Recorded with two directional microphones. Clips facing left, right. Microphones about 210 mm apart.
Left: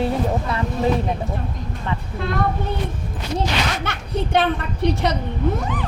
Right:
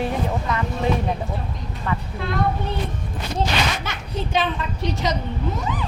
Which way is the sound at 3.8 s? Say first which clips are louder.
Left 3 dB; 60° left (ahead or behind).